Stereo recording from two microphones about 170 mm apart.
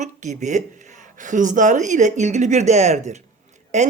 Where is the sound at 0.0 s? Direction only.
45° right (ahead or behind).